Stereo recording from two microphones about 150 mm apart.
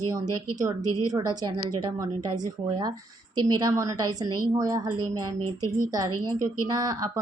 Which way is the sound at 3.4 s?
25° right (ahead or behind).